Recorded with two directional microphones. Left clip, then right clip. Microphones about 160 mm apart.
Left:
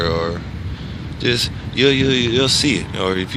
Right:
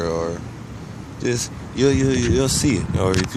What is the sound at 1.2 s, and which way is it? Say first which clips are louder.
Speech: left 5 dB; 10° right (ahead or behind).